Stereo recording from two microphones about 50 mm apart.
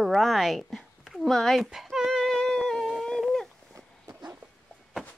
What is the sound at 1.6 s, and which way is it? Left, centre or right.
Speech, centre.